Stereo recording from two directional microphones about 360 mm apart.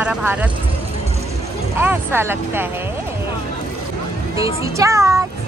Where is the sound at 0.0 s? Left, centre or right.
Centre.